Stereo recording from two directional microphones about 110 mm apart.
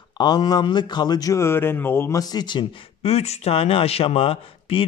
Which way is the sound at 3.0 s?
80° left.